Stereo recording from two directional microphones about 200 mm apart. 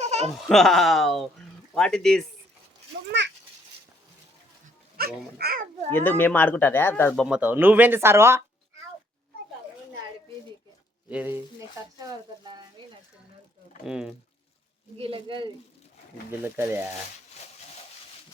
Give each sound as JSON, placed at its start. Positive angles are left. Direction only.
{"t": 0.0, "sound": "laughter", "side_deg": -35}
{"t": 0.4, "sound": "speech", "side_deg": 0}
{"t": 3.1, "sound": "speech", "side_deg": -60}
{"t": 4.9, "sound": "speech", "side_deg": -50}
{"t": 5.9, "sound": "speech", "side_deg": 10}
{"t": 7.3, "sound": "speech", "side_deg": -5}
{"t": 11.1, "sound": "speech", "side_deg": -5}
{"t": 11.9, "sound": "speech", "side_deg": -20}
{"t": 13.8, "sound": "speech", "side_deg": -5}
{"t": 14.9, "sound": "speech", "side_deg": -25}
{"t": 16.4, "sound": "speech", "side_deg": -10}